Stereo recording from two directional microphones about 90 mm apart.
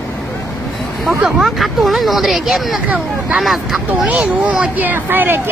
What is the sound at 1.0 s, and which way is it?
Speech, 5° right (ahead or behind).